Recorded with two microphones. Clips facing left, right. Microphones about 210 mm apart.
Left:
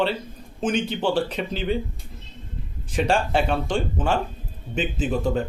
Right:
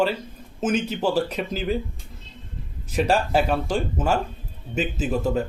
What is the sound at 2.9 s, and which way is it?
Speech, 5° right (ahead or behind).